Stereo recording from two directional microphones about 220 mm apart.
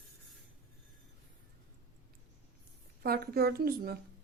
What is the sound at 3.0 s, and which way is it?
Speech, 45° right (ahead or behind).